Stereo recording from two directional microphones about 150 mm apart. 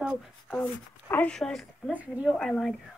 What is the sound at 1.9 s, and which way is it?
Speech, 10° right (ahead or behind).